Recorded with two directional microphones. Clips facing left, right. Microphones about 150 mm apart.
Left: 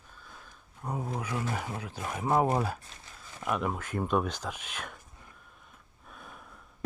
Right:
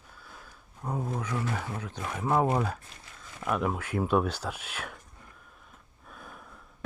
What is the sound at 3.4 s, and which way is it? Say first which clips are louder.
Speech: right 2 dB; centre (ahead or behind).